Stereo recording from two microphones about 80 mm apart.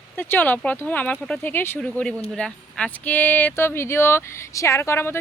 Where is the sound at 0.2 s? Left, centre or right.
Left.